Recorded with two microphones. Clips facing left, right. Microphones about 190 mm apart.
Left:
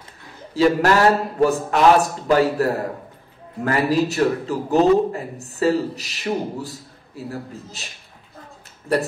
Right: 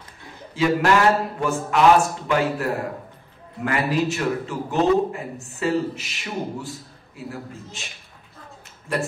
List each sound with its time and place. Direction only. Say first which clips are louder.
0.6 s a man's voice: left 3 dB; 40° left (ahead or behind)
8.9 s a man's voice: left 5 dB; 35° left (ahead or behind)